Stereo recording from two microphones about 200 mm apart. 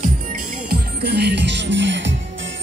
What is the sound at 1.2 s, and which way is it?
Music, 60° right (ahead or behind).